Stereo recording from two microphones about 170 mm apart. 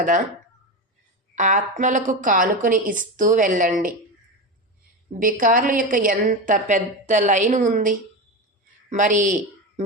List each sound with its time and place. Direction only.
1.4 s a woman's voice: 45° right (ahead or behind)
5.2 s a woman's voice: 50° right (ahead or behind)